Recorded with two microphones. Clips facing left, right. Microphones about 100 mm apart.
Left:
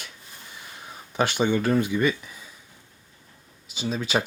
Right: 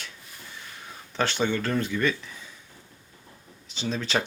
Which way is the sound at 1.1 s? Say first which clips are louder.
Left 3 dB; 15° left (ahead or behind).